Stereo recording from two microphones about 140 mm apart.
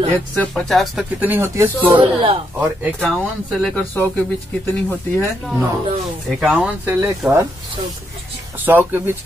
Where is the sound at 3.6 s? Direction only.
10° left (ahead or behind).